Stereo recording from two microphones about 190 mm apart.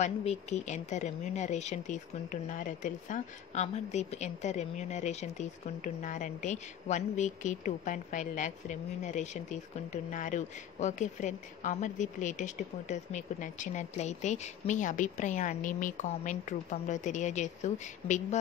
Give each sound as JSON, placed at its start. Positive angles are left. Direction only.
{"t": 0.0, "sound": "a woman's voice", "side_deg": 35}